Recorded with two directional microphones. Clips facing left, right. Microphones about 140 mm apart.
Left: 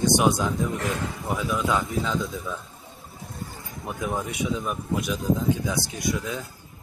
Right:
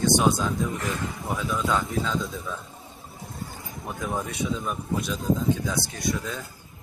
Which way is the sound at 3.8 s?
Centre (ahead or behind).